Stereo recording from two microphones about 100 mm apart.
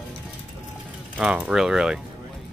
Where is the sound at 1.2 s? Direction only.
10° right (ahead or behind).